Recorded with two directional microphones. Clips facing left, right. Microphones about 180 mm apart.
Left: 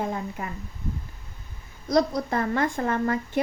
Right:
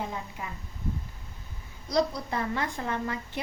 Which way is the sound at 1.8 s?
50° left (ahead or behind).